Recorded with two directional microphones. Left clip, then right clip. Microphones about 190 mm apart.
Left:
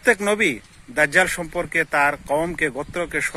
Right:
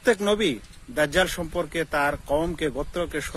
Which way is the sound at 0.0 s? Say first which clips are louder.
Left 3 dB; 10° left (ahead or behind).